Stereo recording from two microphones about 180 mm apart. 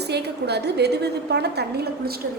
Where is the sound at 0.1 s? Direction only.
65° right (ahead or behind).